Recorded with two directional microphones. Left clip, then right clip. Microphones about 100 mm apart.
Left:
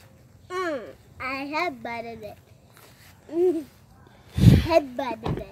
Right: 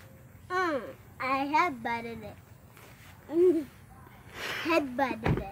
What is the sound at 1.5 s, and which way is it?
Child singing, 20° right (ahead or behind).